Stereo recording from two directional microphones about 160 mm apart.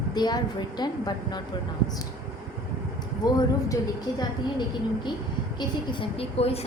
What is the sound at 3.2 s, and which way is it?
Speech, 25° left (ahead or behind).